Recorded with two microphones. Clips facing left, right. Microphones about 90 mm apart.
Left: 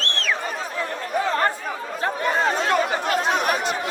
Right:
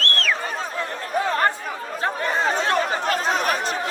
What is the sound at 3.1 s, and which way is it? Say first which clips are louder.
Chatter: left 1 dB; 40° right (ahead or behind).